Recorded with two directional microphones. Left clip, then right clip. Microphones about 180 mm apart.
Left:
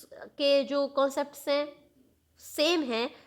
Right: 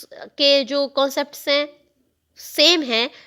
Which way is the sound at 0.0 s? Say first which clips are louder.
Right 10 dB; 30° right (ahead or behind).